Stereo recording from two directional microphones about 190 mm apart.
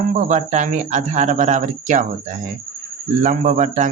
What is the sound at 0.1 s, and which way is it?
Speech, 40° right (ahead or behind).